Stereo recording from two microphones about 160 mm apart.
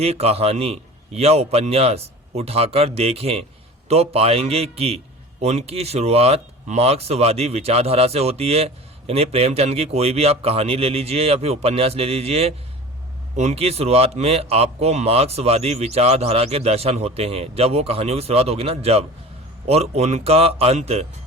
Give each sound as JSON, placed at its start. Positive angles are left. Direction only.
{"t": 0.0, "sound": "speech", "side_deg": -40}